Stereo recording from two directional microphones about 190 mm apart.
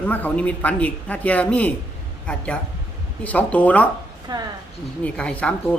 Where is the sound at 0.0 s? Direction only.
10° left (ahead or behind).